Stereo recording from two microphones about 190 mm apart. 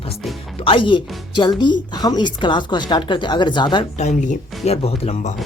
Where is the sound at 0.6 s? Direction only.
25° left (ahead or behind).